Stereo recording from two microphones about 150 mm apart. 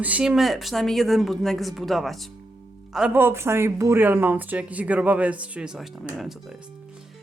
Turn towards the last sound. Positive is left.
turn(degrees=-5)  # may be behind; listen again after turning